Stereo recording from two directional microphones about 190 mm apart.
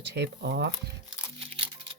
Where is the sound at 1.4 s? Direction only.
30° right (ahead or behind).